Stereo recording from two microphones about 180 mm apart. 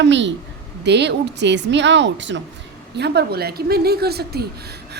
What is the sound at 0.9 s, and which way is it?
A woman's voice, 70° right (ahead or behind).